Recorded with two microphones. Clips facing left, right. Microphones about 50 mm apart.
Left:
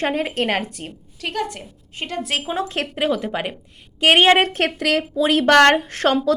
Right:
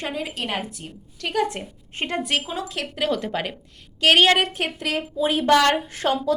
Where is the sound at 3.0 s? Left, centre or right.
Centre.